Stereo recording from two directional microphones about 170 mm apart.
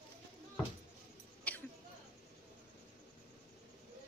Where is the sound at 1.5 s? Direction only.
10° left (ahead or behind).